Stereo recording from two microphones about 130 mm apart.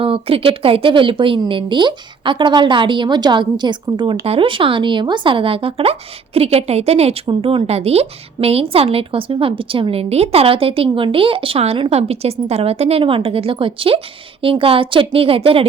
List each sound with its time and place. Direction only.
0.0 s a woman's voice: 45° right (ahead or behind)